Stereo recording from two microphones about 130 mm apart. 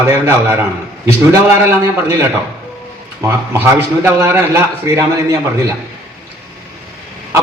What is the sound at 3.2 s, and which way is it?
A man's voice, 15° right (ahead or behind).